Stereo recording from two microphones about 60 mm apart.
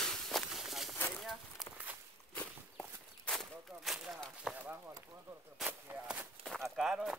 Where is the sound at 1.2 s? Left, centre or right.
Centre.